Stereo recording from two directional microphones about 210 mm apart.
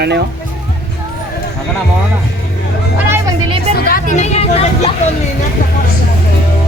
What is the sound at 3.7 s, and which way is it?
Speech, 45° left (ahead or behind).